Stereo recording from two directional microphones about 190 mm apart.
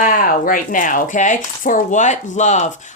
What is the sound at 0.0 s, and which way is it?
Speech, 45° left (ahead or behind).